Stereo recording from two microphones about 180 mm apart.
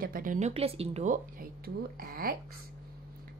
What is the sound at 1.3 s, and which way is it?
Speech, 55° right (ahead or behind).